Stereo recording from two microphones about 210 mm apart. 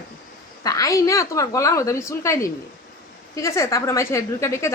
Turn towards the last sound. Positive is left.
turn(degrees=15)  # may be behind; listen again after turning